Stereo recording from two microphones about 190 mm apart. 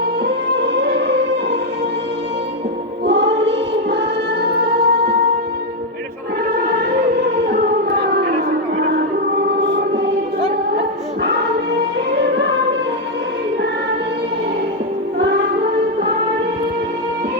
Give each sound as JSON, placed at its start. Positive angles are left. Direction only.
{"t": 0.5, "sound": "music", "side_deg": -65}
{"t": 3.1, "sound": "singing", "side_deg": -65}
{"t": 4.7, "sound": "music", "side_deg": -55}
{"t": 7.2, "sound": "music", "side_deg": -60}
{"t": 8.0, "sound": "a sound", "side_deg": -60}
{"t": 9.6, "sound": "music", "side_deg": -60}